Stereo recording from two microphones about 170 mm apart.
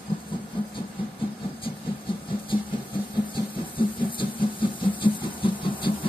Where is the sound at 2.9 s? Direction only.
30° left (ahead or behind).